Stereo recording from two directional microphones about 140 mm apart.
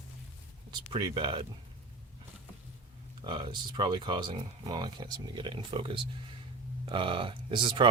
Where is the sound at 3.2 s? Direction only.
35° right (ahead or behind).